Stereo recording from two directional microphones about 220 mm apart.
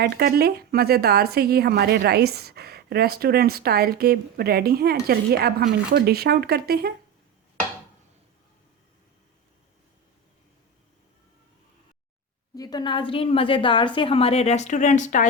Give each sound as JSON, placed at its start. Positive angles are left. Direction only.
{"t": 0.0, "sound": "speech", "side_deg": -45}
{"t": 12.5, "sound": "a woman's voice", "side_deg": 20}